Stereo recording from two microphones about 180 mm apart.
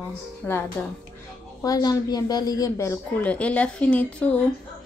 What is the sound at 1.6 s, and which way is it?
Speech, 20° left (ahead or behind).